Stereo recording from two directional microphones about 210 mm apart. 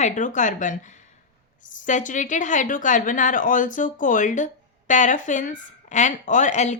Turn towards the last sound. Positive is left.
turn(degrees=35)  # may be behind; listen again after turning